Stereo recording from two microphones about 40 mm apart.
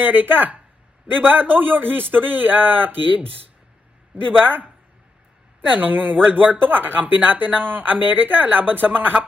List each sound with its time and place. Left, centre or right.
0.0 s speech: right
5.6 s speech: right